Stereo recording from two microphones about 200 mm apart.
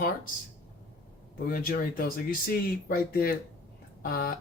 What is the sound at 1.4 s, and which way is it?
Speech, 45° left (ahead or behind).